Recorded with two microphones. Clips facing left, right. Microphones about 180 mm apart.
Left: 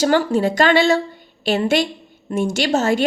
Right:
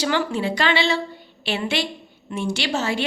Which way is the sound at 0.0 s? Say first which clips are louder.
Left 6 dB; 45° left (ahead or behind).